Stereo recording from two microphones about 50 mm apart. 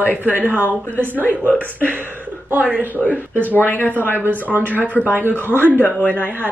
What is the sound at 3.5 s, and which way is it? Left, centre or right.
Speech, left.